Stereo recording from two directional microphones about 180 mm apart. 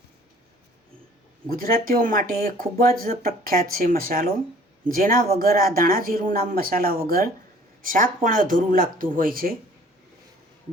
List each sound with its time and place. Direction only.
1.5 s speech: 55° right (ahead or behind)